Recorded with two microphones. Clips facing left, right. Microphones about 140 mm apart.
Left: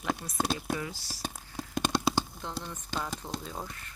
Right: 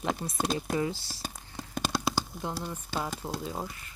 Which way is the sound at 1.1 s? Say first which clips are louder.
Left 2 dB; centre (ahead or behind).